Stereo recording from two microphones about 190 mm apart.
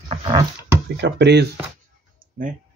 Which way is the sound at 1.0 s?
65° right (ahead or behind).